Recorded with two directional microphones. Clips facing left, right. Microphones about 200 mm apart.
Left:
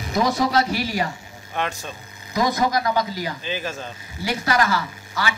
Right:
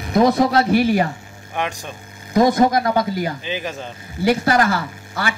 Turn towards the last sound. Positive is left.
turn(degrees=-50)  # may be behind; listen again after turning